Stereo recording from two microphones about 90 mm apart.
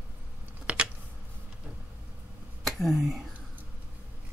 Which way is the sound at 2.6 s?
Centre (ahead or behind).